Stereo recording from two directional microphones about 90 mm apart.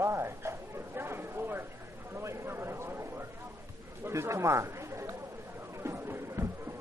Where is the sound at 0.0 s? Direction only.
30° right (ahead or behind).